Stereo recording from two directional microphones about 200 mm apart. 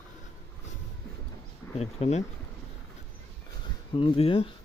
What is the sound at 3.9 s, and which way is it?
Speech, 25° left (ahead or behind).